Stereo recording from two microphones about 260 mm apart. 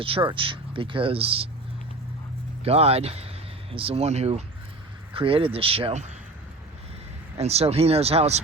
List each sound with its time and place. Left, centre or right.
0.0 s speech: right
2.6 s speech: right
7.3 s speech: right